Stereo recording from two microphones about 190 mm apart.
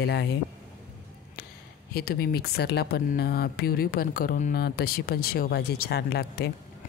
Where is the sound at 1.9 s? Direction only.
55° left (ahead or behind).